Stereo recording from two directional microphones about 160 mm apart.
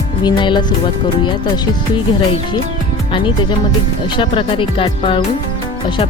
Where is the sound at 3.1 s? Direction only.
30° left (ahead or behind).